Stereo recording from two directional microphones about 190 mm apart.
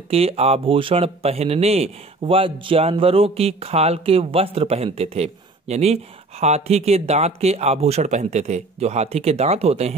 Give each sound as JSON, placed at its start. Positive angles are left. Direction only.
{"t": 0.1, "sound": "speech", "side_deg": -30}